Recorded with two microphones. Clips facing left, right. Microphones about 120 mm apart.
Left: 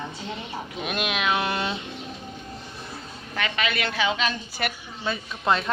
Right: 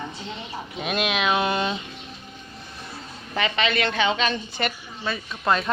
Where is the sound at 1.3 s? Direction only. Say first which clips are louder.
Right 3 dB; 20° right (ahead or behind).